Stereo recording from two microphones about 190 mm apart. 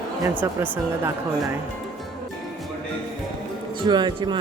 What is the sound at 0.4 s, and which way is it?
Speech, 15° right (ahead or behind).